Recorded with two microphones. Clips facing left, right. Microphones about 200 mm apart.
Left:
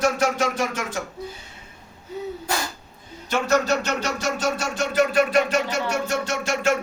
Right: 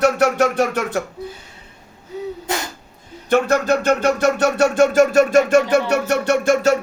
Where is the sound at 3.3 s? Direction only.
55° right (ahead or behind).